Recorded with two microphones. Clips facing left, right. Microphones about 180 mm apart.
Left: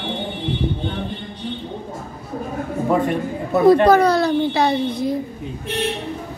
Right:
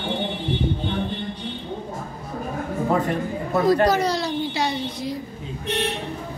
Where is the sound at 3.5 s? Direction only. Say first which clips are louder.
Left 6 dB; 60° left (ahead or behind).